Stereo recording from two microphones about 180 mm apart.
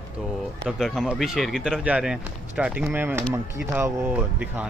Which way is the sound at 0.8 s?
Centre (ahead or behind).